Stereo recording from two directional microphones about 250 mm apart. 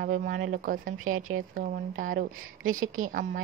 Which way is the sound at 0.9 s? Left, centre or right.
Right.